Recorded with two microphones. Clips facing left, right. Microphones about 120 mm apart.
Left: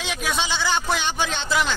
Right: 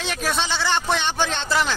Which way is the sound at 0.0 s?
Centre (ahead or behind).